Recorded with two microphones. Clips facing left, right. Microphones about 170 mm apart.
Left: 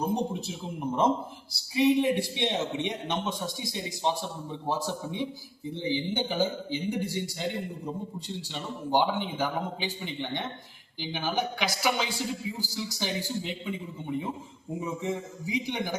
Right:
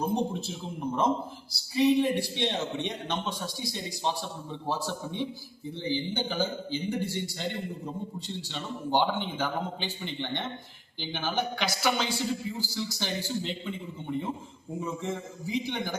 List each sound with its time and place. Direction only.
0.0 s a man's voice: 10° left (ahead or behind)